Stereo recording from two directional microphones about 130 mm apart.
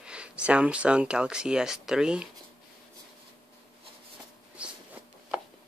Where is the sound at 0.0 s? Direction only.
10° right (ahead or behind).